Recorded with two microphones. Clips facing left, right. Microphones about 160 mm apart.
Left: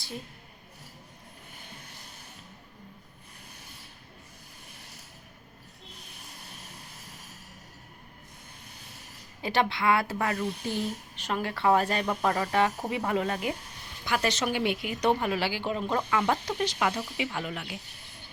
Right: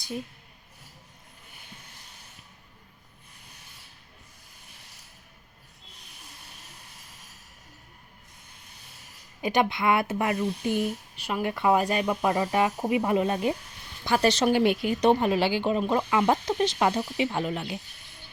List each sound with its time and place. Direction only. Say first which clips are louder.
9.4 s speech: right 2 dB; 15° right (ahead or behind)
14.0 s speech: right 6 dB; 30° right (ahead or behind)
15.0 s speech: right 4 dB; 25° right (ahead or behind)